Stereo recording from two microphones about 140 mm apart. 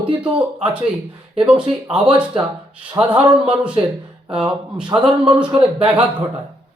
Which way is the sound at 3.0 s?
10° right (ahead or behind).